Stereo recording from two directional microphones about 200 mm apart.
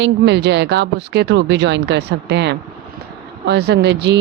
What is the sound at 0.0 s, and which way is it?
Speech, 60° right (ahead or behind).